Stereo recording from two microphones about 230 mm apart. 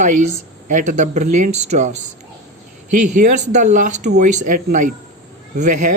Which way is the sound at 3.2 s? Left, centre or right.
Right.